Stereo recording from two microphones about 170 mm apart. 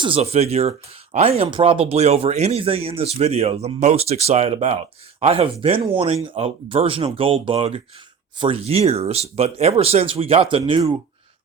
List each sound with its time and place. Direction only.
0.0 s speech: 35° right (ahead or behind)